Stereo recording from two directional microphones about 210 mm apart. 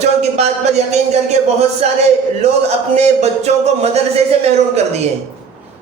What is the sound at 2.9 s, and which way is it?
A man's voice, 30° right (ahead or behind).